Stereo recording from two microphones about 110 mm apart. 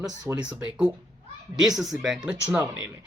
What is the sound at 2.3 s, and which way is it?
Speech, 15° right (ahead or behind).